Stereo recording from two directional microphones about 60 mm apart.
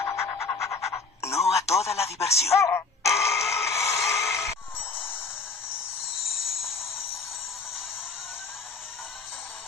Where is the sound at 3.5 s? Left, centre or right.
Left.